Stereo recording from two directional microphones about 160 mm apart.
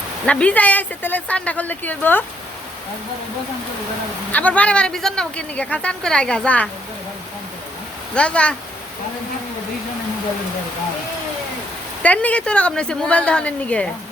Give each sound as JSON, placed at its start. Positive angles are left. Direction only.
{"t": 0.3, "sound": "speech", "side_deg": 10}
{"t": 4.3, "sound": "speech", "side_deg": 10}
{"t": 8.1, "sound": "speech", "side_deg": 5}
{"t": 12.0, "sound": "speech", "side_deg": 10}